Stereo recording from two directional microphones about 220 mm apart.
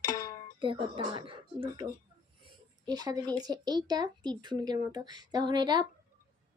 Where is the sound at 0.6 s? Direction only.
20° right (ahead or behind).